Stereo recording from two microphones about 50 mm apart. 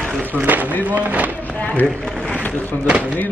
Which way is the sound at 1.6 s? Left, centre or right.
Left.